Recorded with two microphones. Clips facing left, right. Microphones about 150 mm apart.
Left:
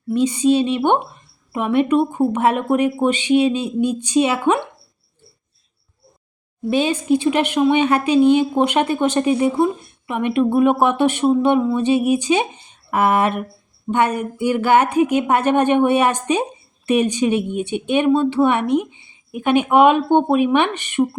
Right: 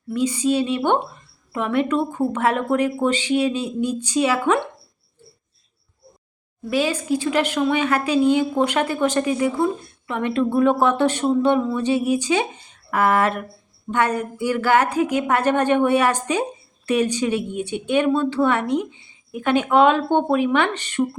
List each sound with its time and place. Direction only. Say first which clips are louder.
0.1 s a woman's voice: left 4 dB; 20° left (ahead or behind)
6.7 s a woman's voice: left 4 dB; 25° left (ahead or behind)